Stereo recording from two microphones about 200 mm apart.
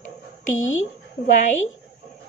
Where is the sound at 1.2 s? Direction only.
40° left (ahead or behind).